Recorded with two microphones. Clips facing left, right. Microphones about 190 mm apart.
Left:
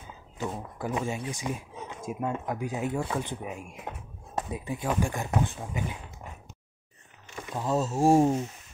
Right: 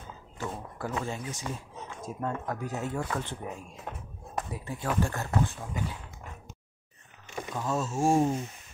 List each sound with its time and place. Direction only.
0.4 s speech: 15° left (ahead or behind)
7.7 s speech: 35° left (ahead or behind)